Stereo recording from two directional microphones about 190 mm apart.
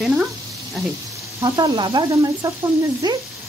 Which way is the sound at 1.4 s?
20° right (ahead or behind).